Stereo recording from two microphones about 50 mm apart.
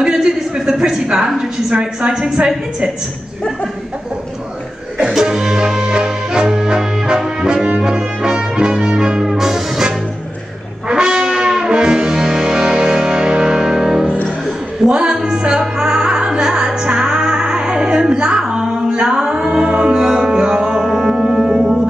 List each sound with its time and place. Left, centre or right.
0.0 s a sound: centre
1.7 s a woman's voice: centre
5.1 s music: centre
18.5 s a capella: centre
19.7 s music: centre